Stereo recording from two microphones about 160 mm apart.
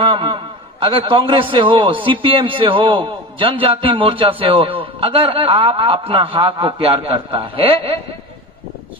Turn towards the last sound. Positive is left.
turn(degrees=-35)  # may be behind; listen again after turning